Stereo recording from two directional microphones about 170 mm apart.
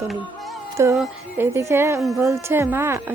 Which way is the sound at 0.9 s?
15° right (ahead or behind).